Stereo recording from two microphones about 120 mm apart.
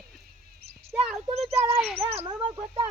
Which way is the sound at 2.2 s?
40° right (ahead or behind).